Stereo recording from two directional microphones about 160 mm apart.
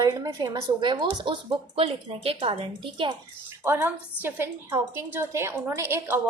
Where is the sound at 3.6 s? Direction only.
15° right (ahead or behind).